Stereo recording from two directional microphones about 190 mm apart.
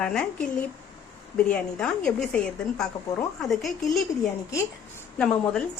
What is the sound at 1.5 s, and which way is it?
A woman's voice, 5° left (ahead or behind).